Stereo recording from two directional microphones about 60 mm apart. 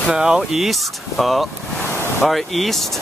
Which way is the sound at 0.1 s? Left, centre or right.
Centre.